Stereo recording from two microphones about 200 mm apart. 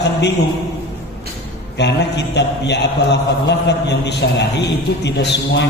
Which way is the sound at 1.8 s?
60° left (ahead or behind).